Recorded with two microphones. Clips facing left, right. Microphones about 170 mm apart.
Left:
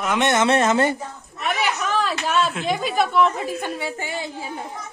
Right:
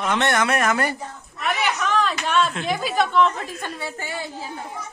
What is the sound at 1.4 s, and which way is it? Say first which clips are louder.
Speech: even; 5° left (ahead or behind).